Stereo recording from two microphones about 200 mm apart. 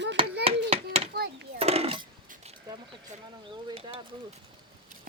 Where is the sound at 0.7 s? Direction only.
30° right (ahead or behind).